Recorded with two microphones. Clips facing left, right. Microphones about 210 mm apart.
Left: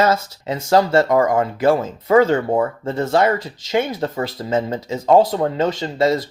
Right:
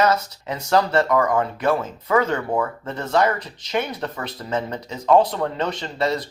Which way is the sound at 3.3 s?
90° left.